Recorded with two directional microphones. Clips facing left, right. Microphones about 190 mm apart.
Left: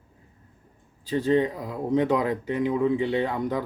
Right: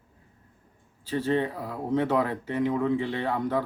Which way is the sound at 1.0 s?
15° left (ahead or behind).